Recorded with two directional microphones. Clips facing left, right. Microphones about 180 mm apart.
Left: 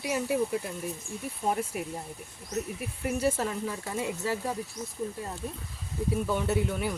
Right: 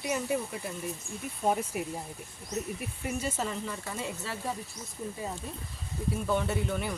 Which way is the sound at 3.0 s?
60° left (ahead or behind).